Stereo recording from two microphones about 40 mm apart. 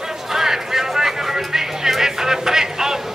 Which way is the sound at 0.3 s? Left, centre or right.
Centre.